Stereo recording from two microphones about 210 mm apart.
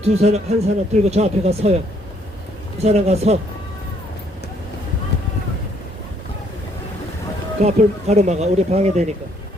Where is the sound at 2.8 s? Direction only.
30° right (ahead or behind).